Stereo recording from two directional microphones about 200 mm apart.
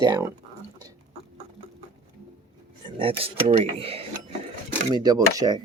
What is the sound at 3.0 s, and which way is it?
Speech, 30° right (ahead or behind).